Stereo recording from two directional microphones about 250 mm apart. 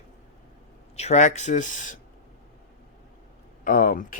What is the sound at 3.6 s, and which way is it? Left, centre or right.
Speech, left.